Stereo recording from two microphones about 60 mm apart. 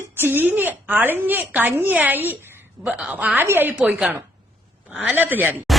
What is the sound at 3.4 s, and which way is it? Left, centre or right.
Speech, right.